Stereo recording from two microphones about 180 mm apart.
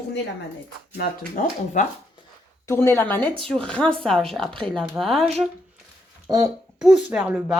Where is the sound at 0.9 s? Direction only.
45° left (ahead or behind).